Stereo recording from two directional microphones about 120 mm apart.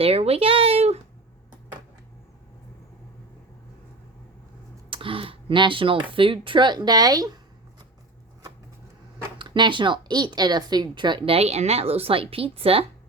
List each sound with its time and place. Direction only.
0.0 s speech: 55° right (ahead or behind)
4.9 s speech: 50° right (ahead or behind); by 7.3 s 30° right (ahead or behind)
9.4 s a woman's voice: 40° right (ahead or behind)
11.3 s a woman's voice: 65° right (ahead or behind)